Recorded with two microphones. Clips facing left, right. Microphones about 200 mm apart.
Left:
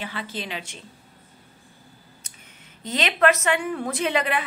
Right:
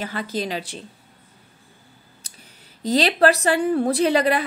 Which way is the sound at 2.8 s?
35° right (ahead or behind).